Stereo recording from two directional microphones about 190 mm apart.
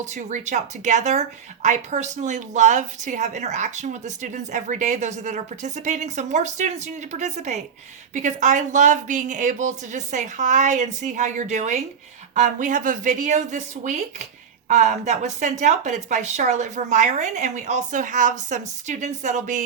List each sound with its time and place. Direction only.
0.0 s speech: 40° right (ahead or behind)